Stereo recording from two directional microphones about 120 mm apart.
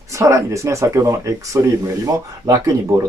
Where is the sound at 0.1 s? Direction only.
25° right (ahead or behind).